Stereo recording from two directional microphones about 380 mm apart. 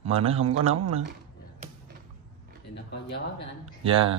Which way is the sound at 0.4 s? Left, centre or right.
Right.